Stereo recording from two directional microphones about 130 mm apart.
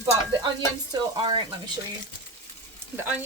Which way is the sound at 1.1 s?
35° right (ahead or behind).